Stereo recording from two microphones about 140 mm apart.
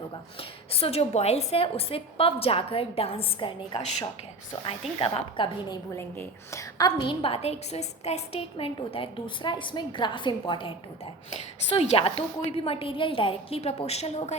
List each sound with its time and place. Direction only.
0.3 s a woman's voice: 45° left (ahead or behind)
5.9 s a woman's voice: 20° left (ahead or behind); by 14.3 s 50° left (ahead or behind)